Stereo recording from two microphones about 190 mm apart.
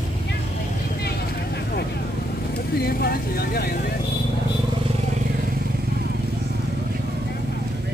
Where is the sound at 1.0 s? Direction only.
60° left (ahead or behind).